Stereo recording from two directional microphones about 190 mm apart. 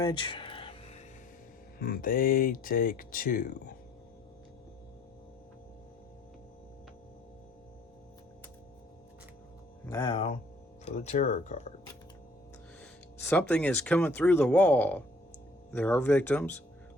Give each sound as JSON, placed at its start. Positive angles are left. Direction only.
{"t": 0.0, "sound": "music", "side_deg": 25}
{"t": 1.8, "sound": "speech", "side_deg": 50}
{"t": 10.0, "sound": "speech", "side_deg": 30}
{"t": 13.1, "sound": "speech", "side_deg": 10}